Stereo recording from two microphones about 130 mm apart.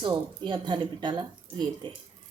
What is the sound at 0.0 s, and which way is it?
A woman's voice, 40° right (ahead or behind).